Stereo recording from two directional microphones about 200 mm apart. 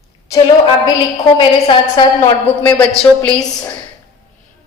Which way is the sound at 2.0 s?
20° left (ahead or behind).